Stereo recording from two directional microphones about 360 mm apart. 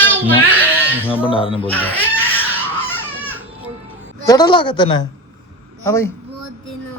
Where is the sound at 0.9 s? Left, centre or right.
Centre.